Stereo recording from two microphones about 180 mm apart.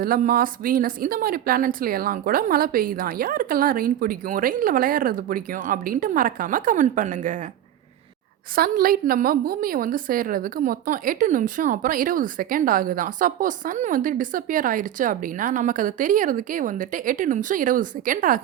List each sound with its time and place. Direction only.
0.0 s a woman's voice: 55° right (ahead or behind)
8.5 s a woman's voice: 55° right (ahead or behind)